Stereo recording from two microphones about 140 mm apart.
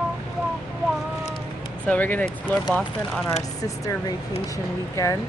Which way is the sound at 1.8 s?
10° left (ahead or behind).